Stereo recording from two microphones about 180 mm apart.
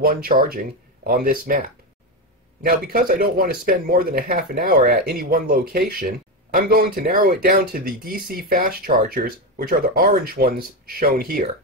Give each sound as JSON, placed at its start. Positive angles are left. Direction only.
{"t": 0.0, "sound": "speech", "side_deg": -55}